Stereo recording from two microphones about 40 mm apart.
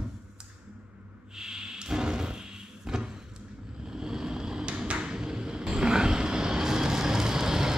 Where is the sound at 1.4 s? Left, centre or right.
Centre.